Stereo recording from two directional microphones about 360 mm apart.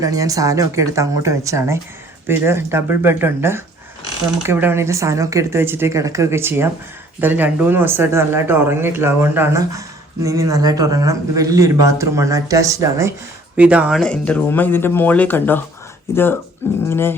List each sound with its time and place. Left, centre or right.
0.0 s speech: centre
16.9 s dog: centre